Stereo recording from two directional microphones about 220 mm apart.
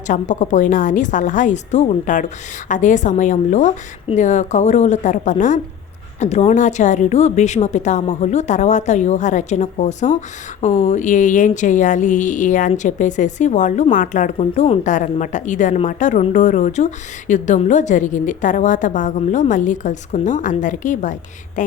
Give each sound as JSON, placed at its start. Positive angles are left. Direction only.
{"t": 0.1, "sound": "a woman's voice", "side_deg": 35}